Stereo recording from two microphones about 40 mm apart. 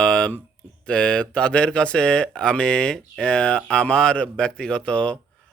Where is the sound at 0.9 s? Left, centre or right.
Left.